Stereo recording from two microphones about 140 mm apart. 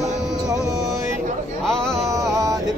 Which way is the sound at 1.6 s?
5° left (ahead or behind).